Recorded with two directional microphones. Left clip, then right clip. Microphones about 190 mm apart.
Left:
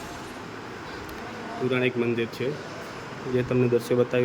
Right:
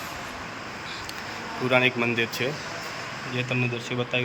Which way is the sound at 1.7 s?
10° left (ahead or behind).